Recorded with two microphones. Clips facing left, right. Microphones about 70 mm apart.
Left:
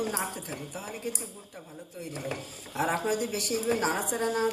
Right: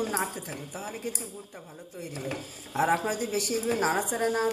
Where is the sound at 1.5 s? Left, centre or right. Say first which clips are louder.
Even; centre.